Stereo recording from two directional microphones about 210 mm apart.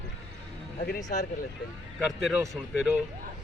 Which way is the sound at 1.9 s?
Centre (ahead or behind).